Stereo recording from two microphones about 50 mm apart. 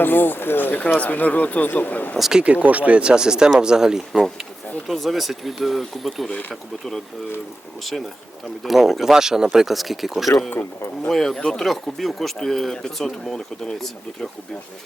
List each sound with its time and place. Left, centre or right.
0.0 s speech: left
2.1 s speech: centre
2.4 s speech: right; by 7.0 s centre
8.6 s speech: centre
11.1 s speech: centre